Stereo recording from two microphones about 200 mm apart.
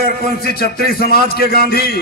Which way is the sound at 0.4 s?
50° left (ahead or behind).